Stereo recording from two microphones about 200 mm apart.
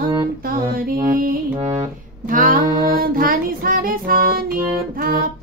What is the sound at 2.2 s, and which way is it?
Child singing, 45° right (ahead or behind).